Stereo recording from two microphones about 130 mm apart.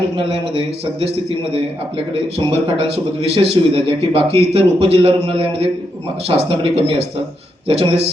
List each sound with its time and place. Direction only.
0.2 s a man's voice: 45° right (ahead or behind)
2.4 s a man's voice: 50° right (ahead or behind)